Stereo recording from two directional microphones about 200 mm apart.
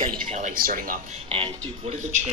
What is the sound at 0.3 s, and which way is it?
Speech, 40° right (ahead or behind).